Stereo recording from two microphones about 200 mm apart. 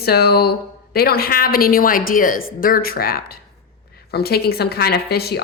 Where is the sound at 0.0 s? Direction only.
50° left (ahead or behind).